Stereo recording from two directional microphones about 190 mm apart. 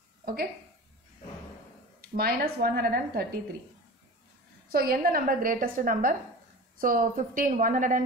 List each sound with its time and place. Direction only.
0.2 s a sound: 50° right (ahead or behind)
2.0 s a woman's voice: 55° right (ahead or behind)
4.6 s a woman's voice: 50° right (ahead or behind)